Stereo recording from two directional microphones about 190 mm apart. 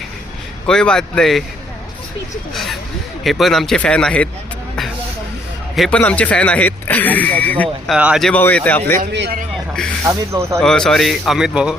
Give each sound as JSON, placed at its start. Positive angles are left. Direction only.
{"t": 0.7, "sound": "a man's voice", "side_deg": 5}
{"t": 3.2, "sound": "a man's voice", "side_deg": 0}
{"t": 5.7, "sound": "speech", "side_deg": 5}
{"t": 7.9, "sound": "speech", "side_deg": -5}
{"t": 9.1, "sound": "speech", "side_deg": -65}
{"t": 9.7, "sound": "a man's voice", "side_deg": 5}
{"t": 10.1, "sound": "speech", "side_deg": -15}
{"t": 10.6, "sound": "a man's voice", "side_deg": 5}